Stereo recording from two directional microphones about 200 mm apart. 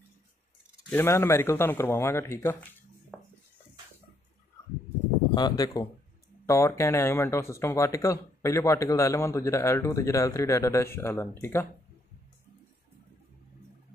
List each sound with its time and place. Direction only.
0.8 s speech: 10° left (ahead or behind)
3.1 s dishes: 5° right (ahead or behind)
5.3 s speech: 20° left (ahead or behind)